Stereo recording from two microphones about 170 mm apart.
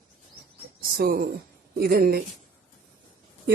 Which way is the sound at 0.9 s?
60° right (ahead or behind).